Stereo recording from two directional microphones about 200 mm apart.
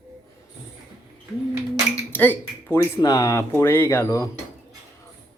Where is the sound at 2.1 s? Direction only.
10° left (ahead or behind).